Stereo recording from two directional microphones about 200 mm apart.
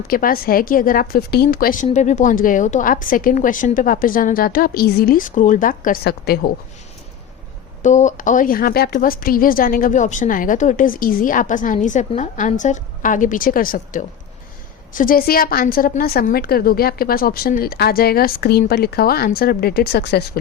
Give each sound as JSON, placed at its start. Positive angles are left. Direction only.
{"t": 0.1, "sound": "a woman's voice", "side_deg": 45}
{"t": 7.8, "sound": "a woman's voice", "side_deg": 35}